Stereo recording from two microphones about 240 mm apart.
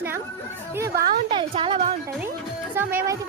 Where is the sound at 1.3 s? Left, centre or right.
Right.